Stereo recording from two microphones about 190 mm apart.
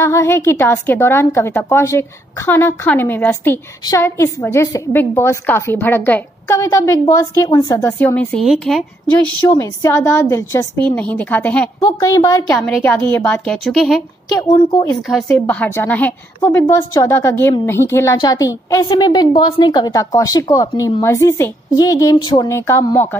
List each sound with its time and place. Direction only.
0.0 s a woman's voice: 15° left (ahead or behind)
9.5 s a woman's voice: 15° left (ahead or behind)
12.5 s a woman's voice: centre (ahead or behind)
14.5 s speech: 20° left (ahead or behind)
15.0 s a woman's voice: centre (ahead or behind)